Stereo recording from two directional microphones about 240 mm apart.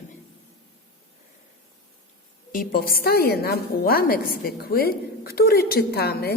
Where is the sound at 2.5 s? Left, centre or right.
Left.